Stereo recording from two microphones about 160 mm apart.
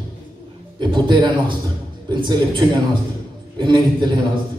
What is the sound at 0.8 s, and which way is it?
Speech, 30° right (ahead or behind).